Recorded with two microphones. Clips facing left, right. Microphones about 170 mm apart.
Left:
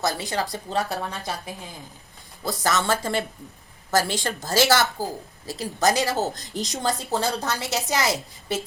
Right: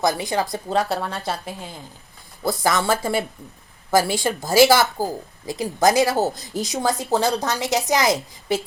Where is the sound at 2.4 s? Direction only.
15° right (ahead or behind).